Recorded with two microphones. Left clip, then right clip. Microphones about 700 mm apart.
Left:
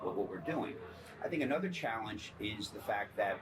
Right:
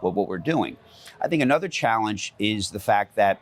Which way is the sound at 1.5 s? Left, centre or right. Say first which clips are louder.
Right 15 dB; right.